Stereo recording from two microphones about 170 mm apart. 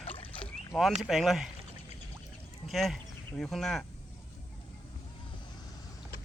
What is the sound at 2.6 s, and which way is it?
Speech, centre (ahead or behind).